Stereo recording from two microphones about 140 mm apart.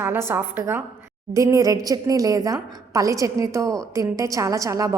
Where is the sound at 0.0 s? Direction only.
15° right (ahead or behind).